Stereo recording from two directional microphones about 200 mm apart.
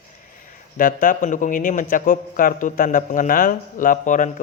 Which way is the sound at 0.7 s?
45° left (ahead or behind).